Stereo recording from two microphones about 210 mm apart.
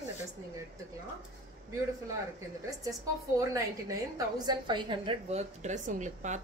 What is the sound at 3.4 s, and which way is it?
A woman's voice, 15° right (ahead or behind).